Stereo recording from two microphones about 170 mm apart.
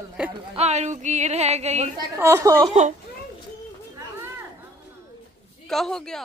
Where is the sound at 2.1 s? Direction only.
15° right (ahead or behind).